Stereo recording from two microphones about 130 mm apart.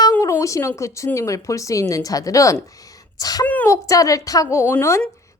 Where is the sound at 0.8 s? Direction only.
25° left (ahead or behind).